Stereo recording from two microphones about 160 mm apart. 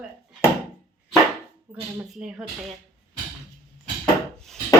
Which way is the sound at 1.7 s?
10° right (ahead or behind).